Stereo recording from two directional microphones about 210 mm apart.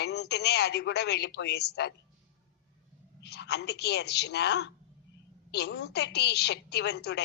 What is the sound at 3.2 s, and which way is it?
A woman's voice, 55° left (ahead or behind).